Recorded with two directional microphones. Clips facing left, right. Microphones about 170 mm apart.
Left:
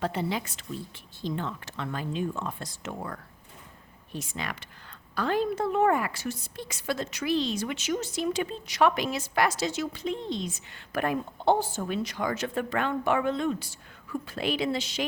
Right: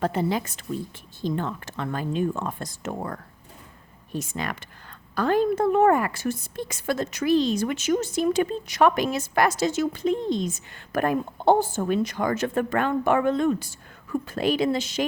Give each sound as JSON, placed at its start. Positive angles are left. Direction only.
{"t": 0.0, "sound": "a woman's voice", "side_deg": -45}